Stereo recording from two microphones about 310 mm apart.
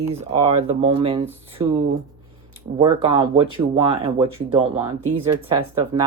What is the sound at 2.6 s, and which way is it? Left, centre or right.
Speech, centre.